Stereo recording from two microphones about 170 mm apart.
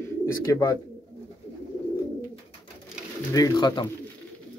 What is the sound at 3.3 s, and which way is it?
Speech, 20° left (ahead or behind).